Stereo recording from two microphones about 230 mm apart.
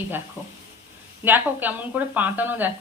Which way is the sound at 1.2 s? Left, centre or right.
Centre.